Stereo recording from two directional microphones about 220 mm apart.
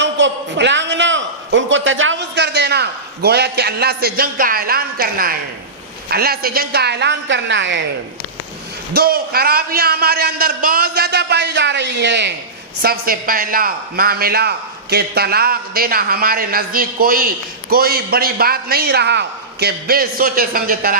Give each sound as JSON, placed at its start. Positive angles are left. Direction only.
{"t": 0.0, "sound": "a man's voice", "side_deg": -55}
{"t": 8.9, "sound": "a man's voice", "side_deg": -45}